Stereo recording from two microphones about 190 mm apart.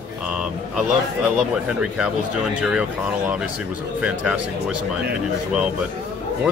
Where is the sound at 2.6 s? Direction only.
5° right (ahead or behind).